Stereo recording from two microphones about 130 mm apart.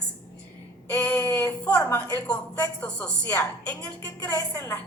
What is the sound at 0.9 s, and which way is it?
A woman's voice, 10° left (ahead or behind).